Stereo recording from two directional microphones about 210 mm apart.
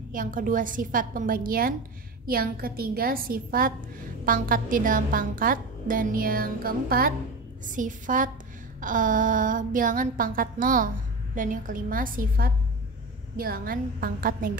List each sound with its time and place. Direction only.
0.1 s a woman's voice: 40° right (ahead or behind)